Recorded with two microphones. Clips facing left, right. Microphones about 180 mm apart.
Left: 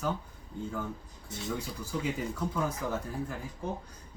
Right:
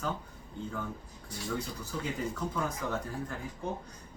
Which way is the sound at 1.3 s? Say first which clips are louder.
Left 2 dB; 20° left (ahead or behind).